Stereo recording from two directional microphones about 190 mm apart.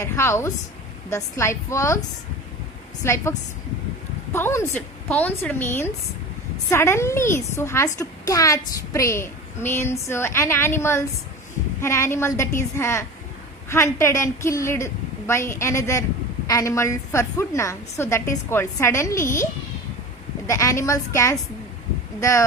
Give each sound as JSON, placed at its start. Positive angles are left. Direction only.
{"t": 0.0, "sound": "a woman's voice", "side_deg": 15}
{"t": 20.5, "sound": "a woman's voice", "side_deg": 15}